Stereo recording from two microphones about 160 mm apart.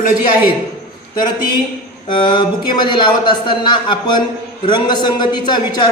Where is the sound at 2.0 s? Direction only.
30° left (ahead or behind).